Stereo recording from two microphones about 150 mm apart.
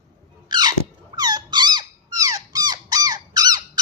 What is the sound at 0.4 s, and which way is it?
Squeak, 30° right (ahead or behind).